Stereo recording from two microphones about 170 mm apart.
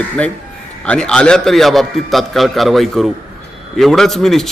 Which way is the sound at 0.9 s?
5° left (ahead or behind).